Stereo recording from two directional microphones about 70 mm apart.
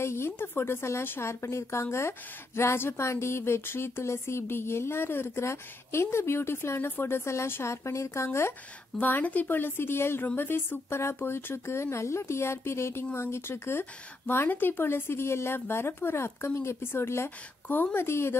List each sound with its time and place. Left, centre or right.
0.0 s speech: left
9.0 s speech: left